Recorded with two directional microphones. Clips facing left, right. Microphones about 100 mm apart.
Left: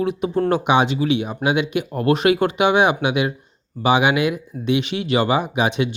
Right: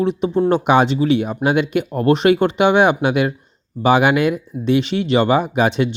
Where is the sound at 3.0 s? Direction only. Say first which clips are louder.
Right 3 dB; 40° right (ahead or behind).